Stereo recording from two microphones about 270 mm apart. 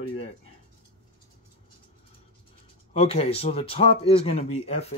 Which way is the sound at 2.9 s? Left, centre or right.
Left.